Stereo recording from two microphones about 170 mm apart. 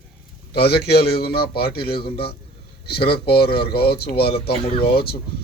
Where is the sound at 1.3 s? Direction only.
65° left (ahead or behind).